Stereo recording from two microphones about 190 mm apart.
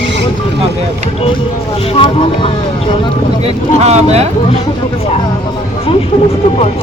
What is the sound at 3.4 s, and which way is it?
Speech, 35° right (ahead or behind).